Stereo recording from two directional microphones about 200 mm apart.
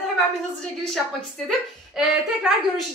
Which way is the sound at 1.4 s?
Centre (ahead or behind).